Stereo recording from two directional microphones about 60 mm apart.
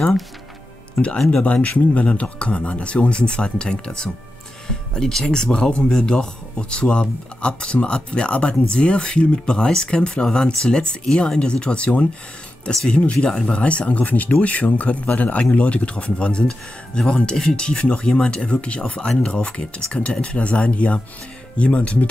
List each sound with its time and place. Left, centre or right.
0.9 s speech: centre
13.3 s speech: centre
13.6 s speech: centre